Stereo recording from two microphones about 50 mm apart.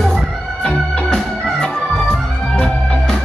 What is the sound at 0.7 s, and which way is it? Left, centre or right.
Music, centre.